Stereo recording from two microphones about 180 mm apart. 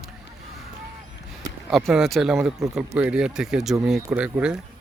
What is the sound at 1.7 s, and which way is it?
Speech, centre (ahead or behind).